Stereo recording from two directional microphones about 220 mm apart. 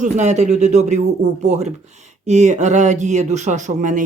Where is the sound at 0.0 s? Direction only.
30° right (ahead or behind).